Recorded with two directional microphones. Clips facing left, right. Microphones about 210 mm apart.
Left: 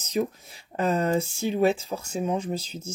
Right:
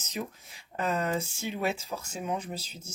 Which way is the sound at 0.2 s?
40° left (ahead or behind).